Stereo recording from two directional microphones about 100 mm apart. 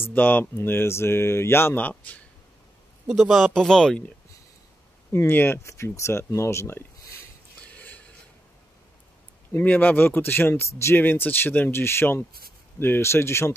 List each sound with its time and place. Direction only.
0.0 s speech: 20° left (ahead or behind)
3.1 s speech: centre (ahead or behind)
5.1 s speech: 20° left (ahead or behind)
7.7 s a sound: 15° left (ahead or behind)
9.5 s speech: 15° left (ahead or behind)